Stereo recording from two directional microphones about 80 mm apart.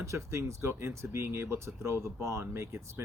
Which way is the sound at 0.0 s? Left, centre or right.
Right.